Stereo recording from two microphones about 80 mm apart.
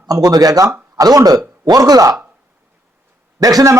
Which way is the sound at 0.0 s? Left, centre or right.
Right.